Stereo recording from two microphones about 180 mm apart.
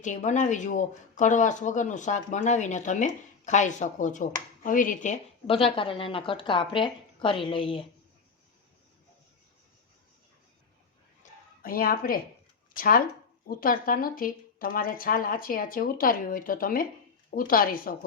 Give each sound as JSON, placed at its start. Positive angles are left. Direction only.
{"t": 0.0, "sound": "speech", "side_deg": 40}
{"t": 5.5, "sound": "a woman's voice", "side_deg": 30}
{"t": 11.2, "sound": "a sound", "side_deg": 50}
{"t": 12.7, "sound": "speech", "side_deg": 50}